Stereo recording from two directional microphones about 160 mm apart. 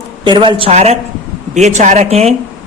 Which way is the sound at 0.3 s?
30° right (ahead or behind).